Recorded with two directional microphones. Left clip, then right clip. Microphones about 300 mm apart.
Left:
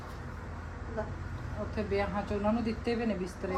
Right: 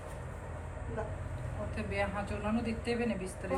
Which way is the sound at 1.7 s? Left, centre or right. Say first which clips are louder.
Left 3 dB; left.